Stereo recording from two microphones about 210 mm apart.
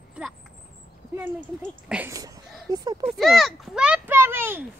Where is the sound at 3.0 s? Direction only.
Centre (ahead or behind).